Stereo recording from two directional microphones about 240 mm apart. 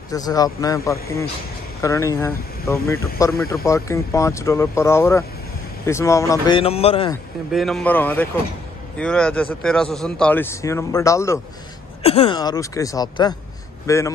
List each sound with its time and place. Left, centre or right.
0.1 s speech: centre
7.5 s a man's voice: centre
12.0 s speech: left